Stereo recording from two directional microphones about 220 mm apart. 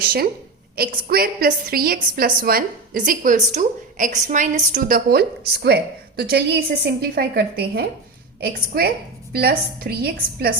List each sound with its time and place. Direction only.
0.0 s a woman's voice: 45° right (ahead or behind)